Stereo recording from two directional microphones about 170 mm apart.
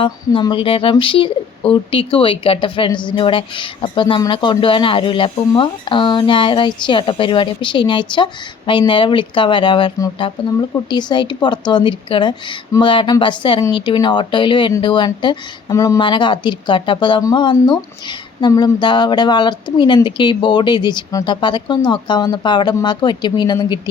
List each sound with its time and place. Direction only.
0.0 s speech: 30° left (ahead or behind)